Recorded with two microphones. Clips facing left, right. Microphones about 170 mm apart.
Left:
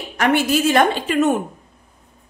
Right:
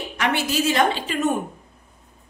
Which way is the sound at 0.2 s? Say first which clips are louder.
Left 6 dB; 55° left (ahead or behind).